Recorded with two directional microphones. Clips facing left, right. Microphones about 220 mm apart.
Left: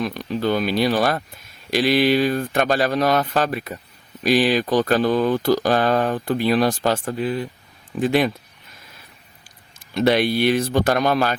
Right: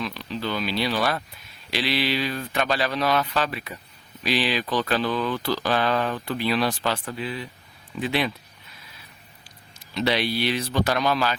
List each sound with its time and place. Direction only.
0.0 s speech: 50° left (ahead or behind)
9.9 s speech: 50° left (ahead or behind)